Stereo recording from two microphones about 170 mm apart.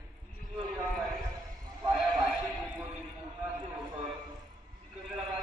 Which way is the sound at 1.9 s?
Centre (ahead or behind).